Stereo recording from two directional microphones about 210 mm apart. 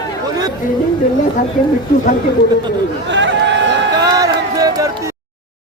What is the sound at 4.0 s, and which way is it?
Music, 20° right (ahead or behind).